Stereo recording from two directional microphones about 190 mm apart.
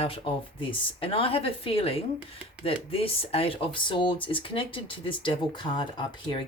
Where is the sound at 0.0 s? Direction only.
30° left (ahead or behind).